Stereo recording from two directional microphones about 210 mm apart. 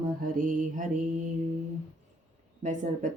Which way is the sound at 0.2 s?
40° right (ahead or behind).